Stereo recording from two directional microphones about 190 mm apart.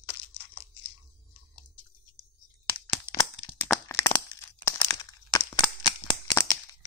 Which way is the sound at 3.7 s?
15° left (ahead or behind).